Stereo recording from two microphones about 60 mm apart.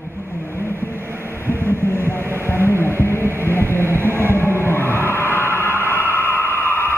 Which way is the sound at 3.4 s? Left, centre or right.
Left.